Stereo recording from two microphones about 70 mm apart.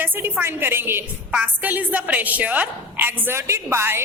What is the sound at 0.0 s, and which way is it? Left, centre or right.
A woman's voice, right.